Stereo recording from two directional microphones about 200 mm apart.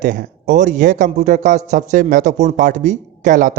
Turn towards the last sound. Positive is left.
turn(degrees=-40)  # may be behind; listen again after turning